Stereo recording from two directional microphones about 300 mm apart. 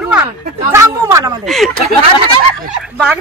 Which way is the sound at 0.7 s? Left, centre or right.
Centre.